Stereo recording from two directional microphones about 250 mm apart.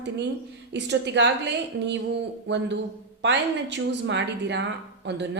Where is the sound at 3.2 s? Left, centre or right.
Right.